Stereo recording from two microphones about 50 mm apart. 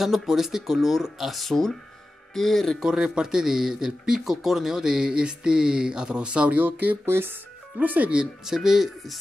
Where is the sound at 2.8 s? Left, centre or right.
Centre; by 8.1 s right.